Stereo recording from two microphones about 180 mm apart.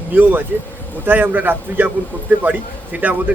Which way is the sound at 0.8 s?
10° left (ahead or behind).